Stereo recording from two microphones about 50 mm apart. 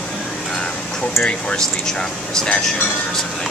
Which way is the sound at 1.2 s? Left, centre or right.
Centre.